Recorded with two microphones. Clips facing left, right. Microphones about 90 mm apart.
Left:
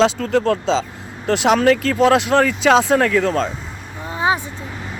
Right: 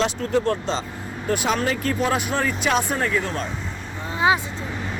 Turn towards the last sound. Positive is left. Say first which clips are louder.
# left 1 dB
turn(degrees=25)  # may be behind; listen again after turning